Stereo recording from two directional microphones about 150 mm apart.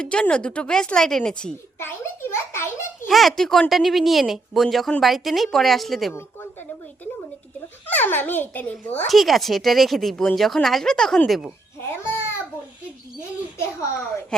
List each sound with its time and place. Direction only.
0.0 s a woman's voice: 5° left (ahead or behind)
3.1 s speech: centre (ahead or behind)
6.1 s a sound: 15° left (ahead or behind)
7.9 s a woman's voice: 10° left (ahead or behind)
11.8 s babbling: 15° left (ahead or behind)
13.6 s a woman's voice: 15° left (ahead or behind)